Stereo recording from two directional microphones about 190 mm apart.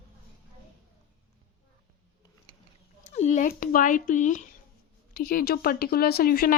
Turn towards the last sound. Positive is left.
turn(degrees=50)  # may be behind; listen again after turning